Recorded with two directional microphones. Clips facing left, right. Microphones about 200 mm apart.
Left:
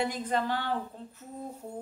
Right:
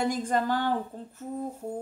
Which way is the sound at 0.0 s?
45° right (ahead or behind).